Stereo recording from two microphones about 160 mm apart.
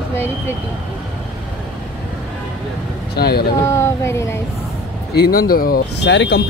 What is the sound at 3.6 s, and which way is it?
Speech, 15° left (ahead or behind).